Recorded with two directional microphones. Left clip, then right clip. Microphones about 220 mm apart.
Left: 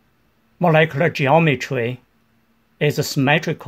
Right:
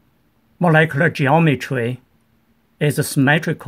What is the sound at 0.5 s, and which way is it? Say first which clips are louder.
Speech: even; 10° right (ahead or behind).